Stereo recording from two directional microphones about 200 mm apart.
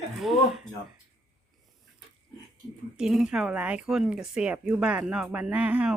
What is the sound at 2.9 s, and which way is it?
Speech, 5° right (ahead or behind).